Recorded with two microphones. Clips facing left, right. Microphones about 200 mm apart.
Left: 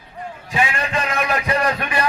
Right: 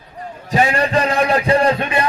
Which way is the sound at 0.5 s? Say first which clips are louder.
Right 6 dB; 40° right (ahead or behind).